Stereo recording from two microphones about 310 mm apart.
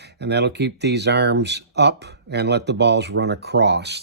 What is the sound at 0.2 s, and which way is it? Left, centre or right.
Speech, right.